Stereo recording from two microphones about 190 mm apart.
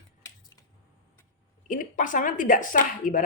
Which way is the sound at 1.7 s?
45° left (ahead or behind).